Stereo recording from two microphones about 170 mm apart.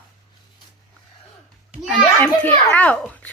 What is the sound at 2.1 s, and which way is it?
Speech, 10° left (ahead or behind).